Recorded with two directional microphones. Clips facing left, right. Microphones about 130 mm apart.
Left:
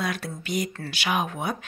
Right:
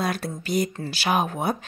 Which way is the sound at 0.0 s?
40° right (ahead or behind).